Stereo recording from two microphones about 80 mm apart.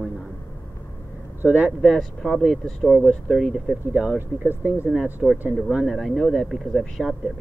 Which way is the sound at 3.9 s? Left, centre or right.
Centre.